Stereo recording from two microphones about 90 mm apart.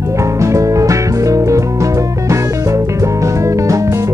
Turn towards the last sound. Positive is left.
turn(degrees=-35)  # may be behind; listen again after turning